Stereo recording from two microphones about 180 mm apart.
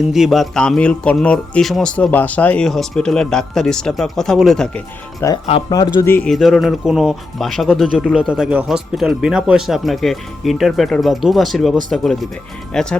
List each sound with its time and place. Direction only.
0.1 s speech: centre (ahead or behind)
5.5 s speech: 30° left (ahead or behind)
6.0 s speech: 15° left (ahead or behind)
6.3 s speech: centre (ahead or behind)